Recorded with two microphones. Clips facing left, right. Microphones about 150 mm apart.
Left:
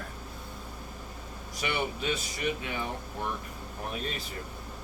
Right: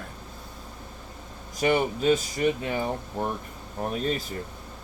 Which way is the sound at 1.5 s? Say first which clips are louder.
Right 9 dB; 45° right (ahead or behind).